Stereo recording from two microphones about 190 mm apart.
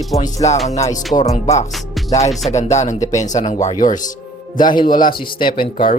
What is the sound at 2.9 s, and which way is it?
Speech, 20° left (ahead or behind).